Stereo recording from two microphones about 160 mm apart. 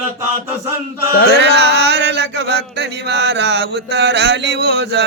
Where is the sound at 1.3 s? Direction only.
90° right.